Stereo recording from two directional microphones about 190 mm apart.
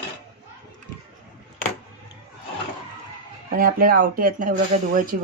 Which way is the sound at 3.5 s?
50° right (ahead or behind).